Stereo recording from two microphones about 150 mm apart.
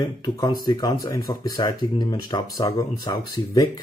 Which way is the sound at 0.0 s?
25° left (ahead or behind).